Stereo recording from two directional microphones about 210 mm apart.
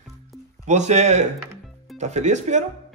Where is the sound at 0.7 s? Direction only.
35° right (ahead or behind).